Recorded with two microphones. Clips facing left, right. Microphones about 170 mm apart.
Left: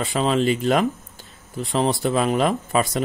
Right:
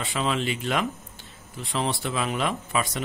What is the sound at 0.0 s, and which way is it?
Speech, 40° left (ahead or behind).